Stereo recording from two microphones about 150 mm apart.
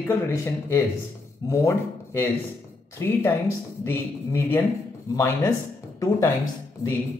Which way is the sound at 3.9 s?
15° left (ahead or behind).